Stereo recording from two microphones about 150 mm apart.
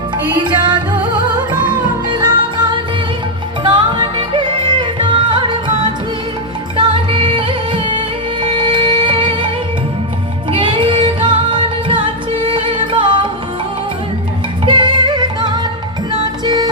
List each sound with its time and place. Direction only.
0.3 s music: 30° right (ahead or behind)
2.0 s music: 30° right (ahead or behind)
10.5 s music: 35° right (ahead or behind)
14.6 s music: 30° right (ahead or behind)